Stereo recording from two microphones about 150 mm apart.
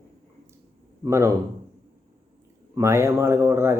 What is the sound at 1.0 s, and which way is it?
Speech, 20° right (ahead or behind).